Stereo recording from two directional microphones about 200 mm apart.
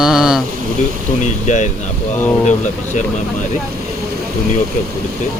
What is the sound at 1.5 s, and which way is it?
Speech, 35° left (ahead or behind).